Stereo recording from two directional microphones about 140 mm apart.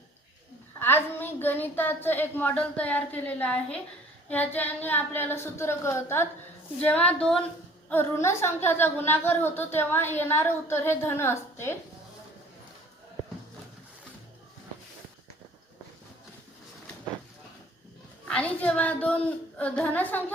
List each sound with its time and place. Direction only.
0.8 s a woman's voice: 15° left (ahead or behind)
7.9 s a woman's voice: 15° left (ahead or behind)
18.3 s a woman's voice: 10° left (ahead or behind)